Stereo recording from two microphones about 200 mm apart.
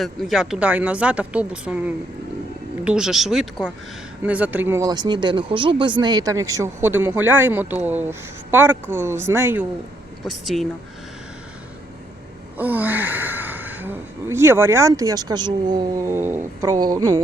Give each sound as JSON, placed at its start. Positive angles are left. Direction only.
{"t": 0.0, "sound": "speech", "side_deg": 0}
{"t": 2.8, "sound": "speech", "side_deg": -5}
{"t": 10.4, "sound": "speech", "side_deg": 0}
{"t": 12.5, "sound": "speech", "side_deg": -10}